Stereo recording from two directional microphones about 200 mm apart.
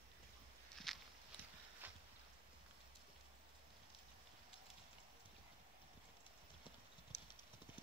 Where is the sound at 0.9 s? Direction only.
Centre (ahead or behind).